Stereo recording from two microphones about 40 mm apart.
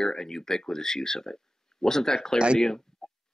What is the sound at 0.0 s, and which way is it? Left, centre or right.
Speech, centre.